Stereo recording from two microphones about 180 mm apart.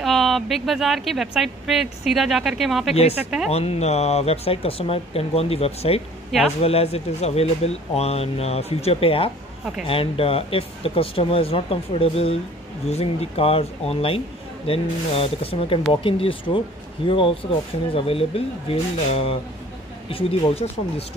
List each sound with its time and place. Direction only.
0.0 s speech: centre (ahead or behind)
3.4 s speech: 35° left (ahead or behind)